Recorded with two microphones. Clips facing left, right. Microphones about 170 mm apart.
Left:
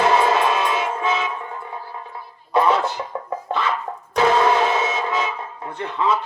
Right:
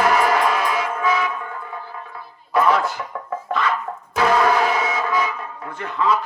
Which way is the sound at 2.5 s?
25° left (ahead or behind).